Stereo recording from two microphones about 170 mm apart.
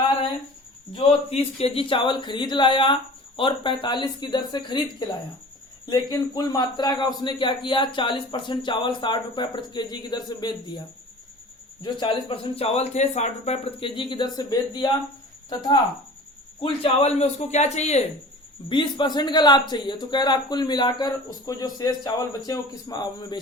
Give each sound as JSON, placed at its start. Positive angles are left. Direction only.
{"t": 0.9, "sound": "speech", "side_deg": 35}
{"t": 16.6, "sound": "speech", "side_deg": 35}
{"t": 18.7, "sound": "speech", "side_deg": 30}